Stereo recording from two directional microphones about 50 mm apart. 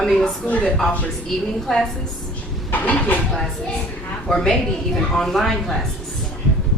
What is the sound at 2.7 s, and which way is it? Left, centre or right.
Speech, left.